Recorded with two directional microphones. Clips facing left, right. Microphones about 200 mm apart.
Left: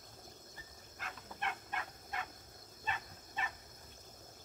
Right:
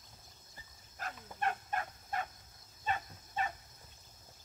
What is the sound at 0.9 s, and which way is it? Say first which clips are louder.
Dog: right 4 dB; 45° right (ahead or behind).